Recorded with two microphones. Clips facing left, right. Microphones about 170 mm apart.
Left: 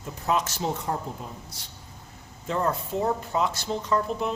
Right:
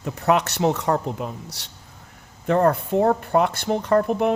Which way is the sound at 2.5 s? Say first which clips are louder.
Right 8 dB; 60° right (ahead or behind).